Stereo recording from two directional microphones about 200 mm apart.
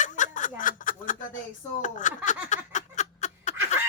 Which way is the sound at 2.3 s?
35° left (ahead or behind).